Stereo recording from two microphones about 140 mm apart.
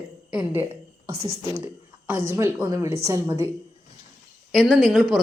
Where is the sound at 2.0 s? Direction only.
20° right (ahead or behind).